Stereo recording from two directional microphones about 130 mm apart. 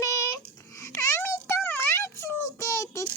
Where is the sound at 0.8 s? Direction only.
20° left (ahead or behind).